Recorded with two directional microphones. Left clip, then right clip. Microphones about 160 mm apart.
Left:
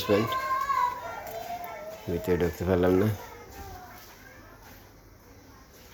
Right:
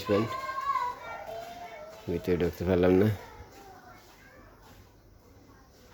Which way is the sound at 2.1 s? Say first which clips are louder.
Left 2 dB; 35° right (ahead or behind).